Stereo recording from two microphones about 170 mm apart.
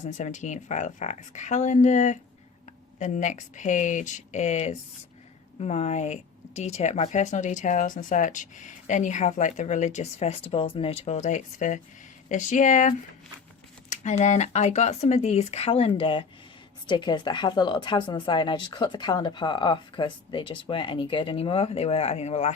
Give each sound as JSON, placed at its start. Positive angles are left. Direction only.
{"t": 0.0, "sound": "a woman's voice", "side_deg": 45}
{"t": 13.9, "sound": "speech", "side_deg": 45}